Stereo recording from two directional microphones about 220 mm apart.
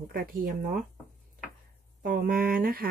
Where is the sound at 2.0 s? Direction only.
40° right (ahead or behind).